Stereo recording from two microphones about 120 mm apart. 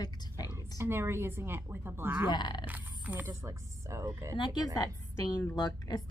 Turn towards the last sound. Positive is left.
turn(degrees=35)  # may be behind; listen again after turning